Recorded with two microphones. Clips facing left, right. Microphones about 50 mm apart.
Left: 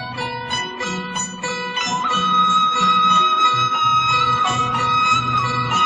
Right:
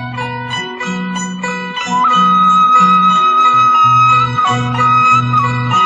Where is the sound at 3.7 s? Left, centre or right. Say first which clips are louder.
Right 9 dB; right.